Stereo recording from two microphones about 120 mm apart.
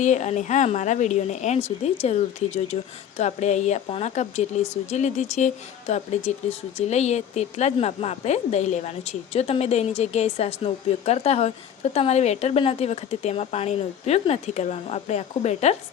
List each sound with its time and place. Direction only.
0.0 s speech: 80° left
5.9 s speech: 65° left (ahead or behind)
9.3 s a woman's voice: 60° left (ahead or behind)